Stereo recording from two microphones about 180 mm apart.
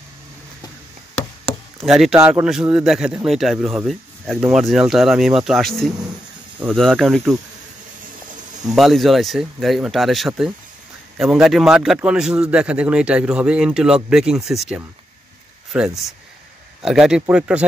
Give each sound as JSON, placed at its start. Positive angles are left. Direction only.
{"t": 1.9, "sound": "a man's voice", "side_deg": 0}
{"t": 2.1, "sound": "a man's voice", "side_deg": -15}
{"t": 2.4, "sound": "a man's voice", "side_deg": -5}
{"t": 8.6, "sound": "a man's voice", "side_deg": 0}